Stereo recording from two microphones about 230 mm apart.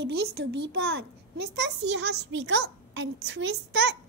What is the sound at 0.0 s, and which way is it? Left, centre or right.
A child's voice, right.